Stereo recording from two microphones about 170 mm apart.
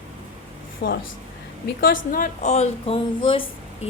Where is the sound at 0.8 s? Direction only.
90° left.